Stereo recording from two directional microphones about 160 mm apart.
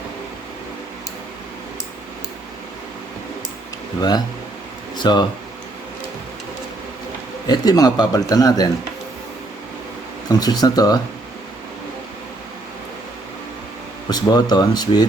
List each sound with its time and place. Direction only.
4.9 s speech: 25° left (ahead or behind)
7.4 s a man's voice: 25° left (ahead or behind)
10.2 s a man's voice: 25° left (ahead or behind)
14.1 s a man's voice: 25° left (ahead or behind)